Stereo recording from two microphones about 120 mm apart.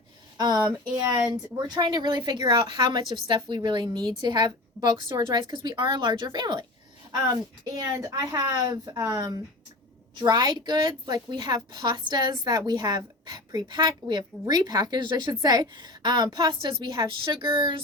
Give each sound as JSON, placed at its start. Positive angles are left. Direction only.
{"t": 0.3, "sound": "a woman's voice", "side_deg": -35}